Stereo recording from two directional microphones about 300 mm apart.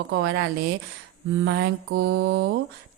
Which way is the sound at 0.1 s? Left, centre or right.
Right.